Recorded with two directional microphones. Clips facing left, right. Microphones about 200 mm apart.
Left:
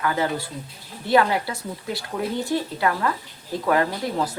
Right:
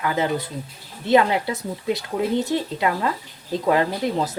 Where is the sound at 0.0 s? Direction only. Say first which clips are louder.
Right 1 dB; 20° right (ahead or behind).